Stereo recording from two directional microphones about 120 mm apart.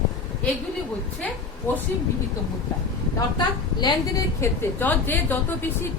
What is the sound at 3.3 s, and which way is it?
Speech, 35° left (ahead or behind).